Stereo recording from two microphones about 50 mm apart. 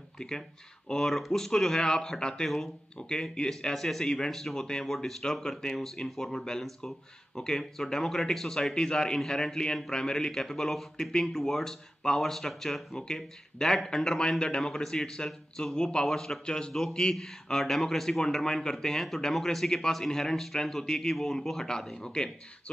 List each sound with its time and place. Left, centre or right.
0.2 s a man's voice: centre
3.7 s speech: centre
4.0 s a man's voice: centre
4.3 s a man's voice: centre